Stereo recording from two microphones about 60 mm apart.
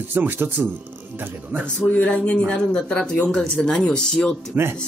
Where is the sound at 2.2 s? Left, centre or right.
Centre.